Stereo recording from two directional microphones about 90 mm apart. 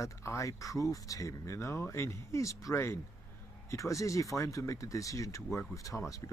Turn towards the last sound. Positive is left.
turn(degrees=35)  # may be behind; listen again after turning